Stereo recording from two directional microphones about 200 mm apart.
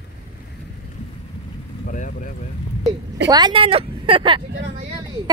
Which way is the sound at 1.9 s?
40° left (ahead or behind).